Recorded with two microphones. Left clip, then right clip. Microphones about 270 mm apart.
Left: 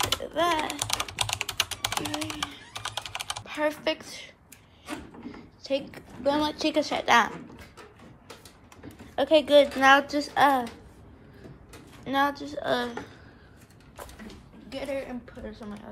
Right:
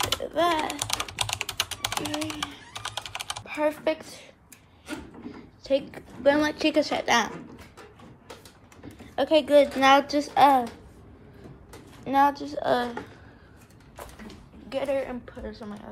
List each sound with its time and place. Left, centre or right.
0.0 s typing: centre
4.8 s printer: centre
5.3 s a sound: centre
6.5 s a woman's voice: centre
9.0 s speech: centre
9.7 s a woman's voice: centre
11.7 s a sound: centre
12.5 s a woman's voice: centre
14.2 s a sound: centre
14.8 s a woman's voice: centre